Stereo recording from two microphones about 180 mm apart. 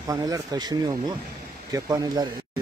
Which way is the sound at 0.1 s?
20° right (ahead or behind).